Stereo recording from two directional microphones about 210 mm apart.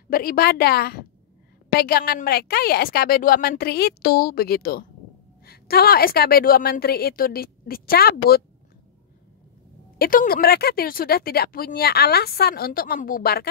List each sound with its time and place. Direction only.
0.1 s speech: 45° left (ahead or behind)
9.9 s speech: 45° left (ahead or behind)